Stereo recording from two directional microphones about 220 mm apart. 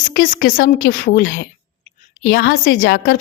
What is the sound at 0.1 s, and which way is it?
A woman's voice, 40° left (ahead or behind).